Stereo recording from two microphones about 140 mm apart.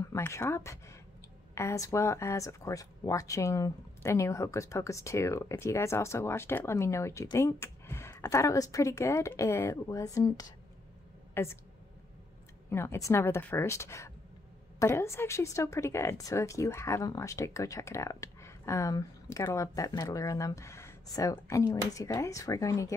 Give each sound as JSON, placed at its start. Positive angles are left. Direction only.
{"t": 0.0, "sound": "speech", "side_deg": 20}
{"t": 11.4, "sound": "a woman's voice", "side_deg": 15}
{"t": 12.7, "sound": "speech", "side_deg": 20}